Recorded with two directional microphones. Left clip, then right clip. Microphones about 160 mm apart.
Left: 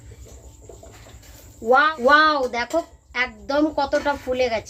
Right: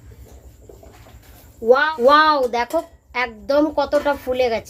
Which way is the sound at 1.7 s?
70° right (ahead or behind).